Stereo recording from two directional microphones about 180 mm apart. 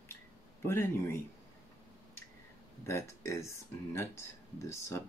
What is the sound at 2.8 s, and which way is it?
Speech, 15° left (ahead or behind).